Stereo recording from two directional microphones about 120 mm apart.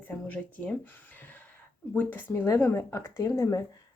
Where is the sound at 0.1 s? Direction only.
10° left (ahead or behind).